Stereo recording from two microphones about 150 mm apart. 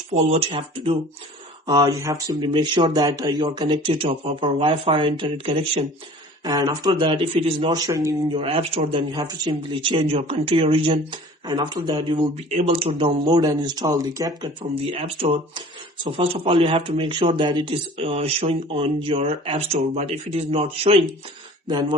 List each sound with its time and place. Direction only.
0.1 s speech: 40° right (ahead or behind)
1.6 s speech: 25° right (ahead or behind)
7.7 s speech: 25° right (ahead or behind)
8.4 s speech: 35° right (ahead or behind); by 14.3 s 20° right (ahead or behind)
14.4 s speech: 40° right (ahead or behind)